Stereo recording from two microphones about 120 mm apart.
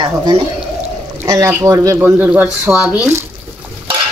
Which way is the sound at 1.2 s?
25° right (ahead or behind).